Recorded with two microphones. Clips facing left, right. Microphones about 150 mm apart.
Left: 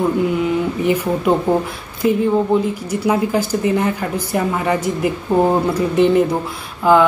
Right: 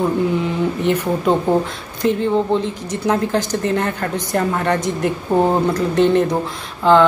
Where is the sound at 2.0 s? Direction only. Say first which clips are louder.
Left 1 dB; 5° left (ahead or behind).